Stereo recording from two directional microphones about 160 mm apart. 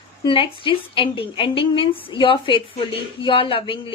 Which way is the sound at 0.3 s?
30° left (ahead or behind).